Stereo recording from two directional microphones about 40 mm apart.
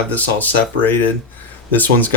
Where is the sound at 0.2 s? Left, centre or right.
Left.